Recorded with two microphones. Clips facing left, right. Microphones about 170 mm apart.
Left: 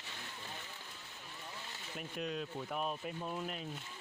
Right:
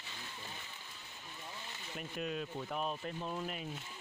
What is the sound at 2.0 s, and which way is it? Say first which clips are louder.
Speech: even; centre (ahead or behind).